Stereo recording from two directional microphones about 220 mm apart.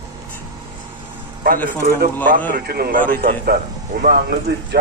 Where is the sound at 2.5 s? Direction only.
45° right (ahead or behind).